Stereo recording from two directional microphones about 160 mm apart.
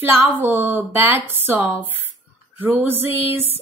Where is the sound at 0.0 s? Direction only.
15° right (ahead or behind).